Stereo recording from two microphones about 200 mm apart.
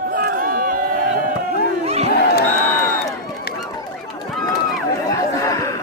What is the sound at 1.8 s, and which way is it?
Chatter, 30° right (ahead or behind).